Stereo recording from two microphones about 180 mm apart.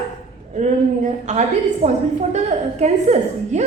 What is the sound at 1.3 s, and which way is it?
A woman's voice, 40° right (ahead or behind).